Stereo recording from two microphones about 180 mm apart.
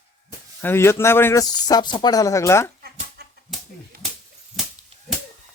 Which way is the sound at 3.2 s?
65° right (ahead or behind).